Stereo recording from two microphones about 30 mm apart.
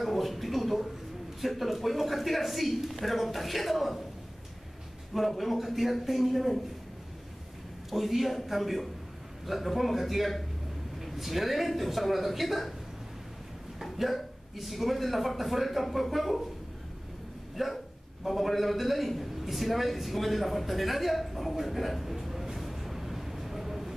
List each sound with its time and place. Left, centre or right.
0.0 s a sound: centre
1.4 s speech: centre
5.4 s speech: centre
7.9 s speech: centre
13.9 s speech: centre
17.6 s a man's voice: centre